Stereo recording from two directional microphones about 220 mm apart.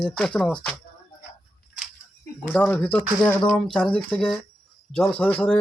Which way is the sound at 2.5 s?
5° left (ahead or behind).